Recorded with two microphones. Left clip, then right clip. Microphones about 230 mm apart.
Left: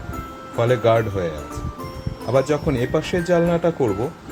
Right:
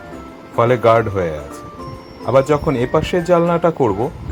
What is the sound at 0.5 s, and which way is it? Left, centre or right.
Speech, centre.